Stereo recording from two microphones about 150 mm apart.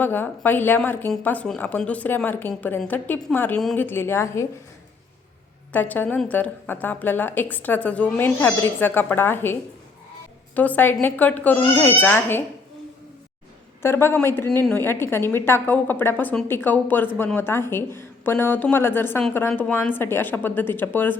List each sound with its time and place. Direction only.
0.0 s a woman's voice: 15° left (ahead or behind)
5.7 s a woman's voice: 10° left (ahead or behind)
13.8 s a woman's voice: 15° left (ahead or behind)